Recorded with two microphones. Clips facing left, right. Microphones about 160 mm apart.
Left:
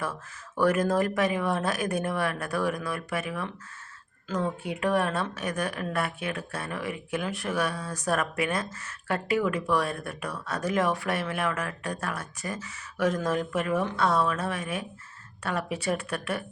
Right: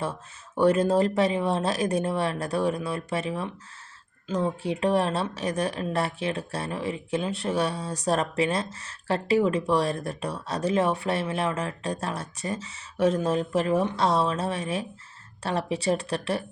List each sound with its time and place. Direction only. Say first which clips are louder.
0.0 s a woman's voice: right 2 dB; 25° right (ahead or behind)
4.6 s a woman's voice: right 3 dB; 30° right (ahead or behind)